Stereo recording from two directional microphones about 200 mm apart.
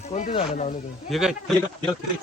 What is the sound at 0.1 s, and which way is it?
Speech, 30° left (ahead or behind).